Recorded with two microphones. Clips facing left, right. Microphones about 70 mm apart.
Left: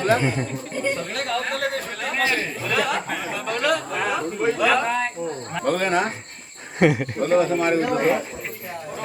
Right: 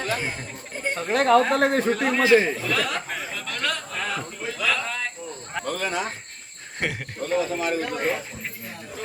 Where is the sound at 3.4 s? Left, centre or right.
Centre.